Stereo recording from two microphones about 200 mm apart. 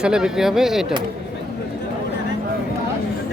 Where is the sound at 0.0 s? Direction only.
5° right (ahead or behind).